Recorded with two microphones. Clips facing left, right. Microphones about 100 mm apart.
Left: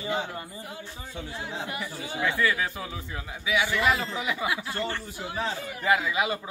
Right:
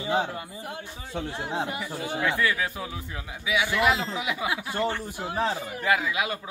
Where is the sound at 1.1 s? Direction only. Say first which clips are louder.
Right 5 dB; 60° right (ahead or behind).